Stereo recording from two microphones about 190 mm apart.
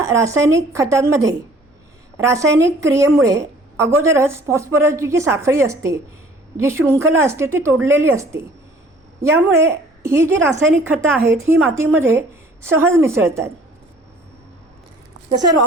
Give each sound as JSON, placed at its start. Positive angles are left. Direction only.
{"t": 0.0, "sound": "a woman's voice", "side_deg": -15}